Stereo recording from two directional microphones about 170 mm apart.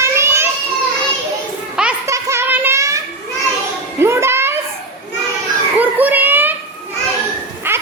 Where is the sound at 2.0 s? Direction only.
15° right (ahead or behind).